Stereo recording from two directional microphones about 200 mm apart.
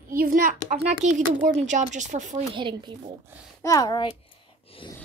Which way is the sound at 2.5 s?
25° right (ahead or behind).